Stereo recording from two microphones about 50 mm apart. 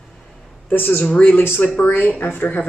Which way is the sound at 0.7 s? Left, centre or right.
Left.